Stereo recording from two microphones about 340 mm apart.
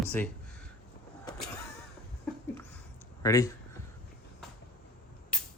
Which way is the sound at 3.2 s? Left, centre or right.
Centre.